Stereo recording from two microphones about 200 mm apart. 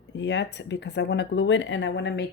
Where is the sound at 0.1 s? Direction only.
60° left (ahead or behind).